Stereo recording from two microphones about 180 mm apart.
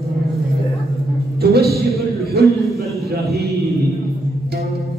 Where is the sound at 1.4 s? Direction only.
60° right (ahead or behind).